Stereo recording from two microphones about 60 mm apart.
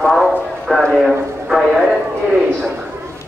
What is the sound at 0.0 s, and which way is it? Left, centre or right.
Clip-clop, centre.